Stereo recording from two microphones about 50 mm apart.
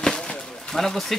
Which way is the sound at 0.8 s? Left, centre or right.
Centre.